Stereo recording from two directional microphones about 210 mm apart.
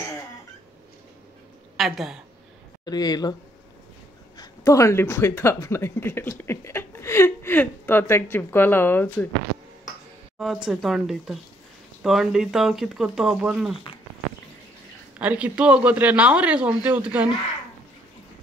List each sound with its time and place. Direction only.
1.8 s speech: centre (ahead or behind)
2.8 s speech: 20° left (ahead or behind)
4.4 s speech: 15° left (ahead or behind)
10.4 s speech: centre (ahead or behind)
15.1 s speech: 5° right (ahead or behind)